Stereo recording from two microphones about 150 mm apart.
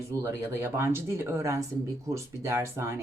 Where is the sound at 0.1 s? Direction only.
20° right (ahead or behind).